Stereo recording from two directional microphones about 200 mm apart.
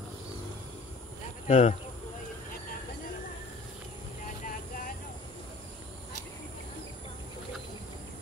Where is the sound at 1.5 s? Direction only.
40° left (ahead or behind).